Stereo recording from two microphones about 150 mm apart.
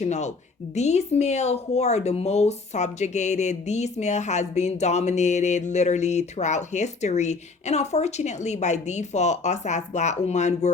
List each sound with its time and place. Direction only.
0.0 s speech: 50° left (ahead or behind)